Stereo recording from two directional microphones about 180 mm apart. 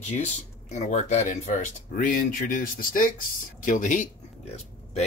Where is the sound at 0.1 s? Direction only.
40° left (ahead or behind).